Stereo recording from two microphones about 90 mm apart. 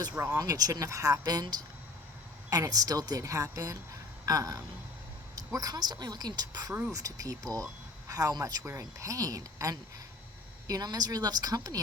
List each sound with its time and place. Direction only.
0.3 s speech: 40° right (ahead or behind)
8.6 s speech: 35° right (ahead or behind)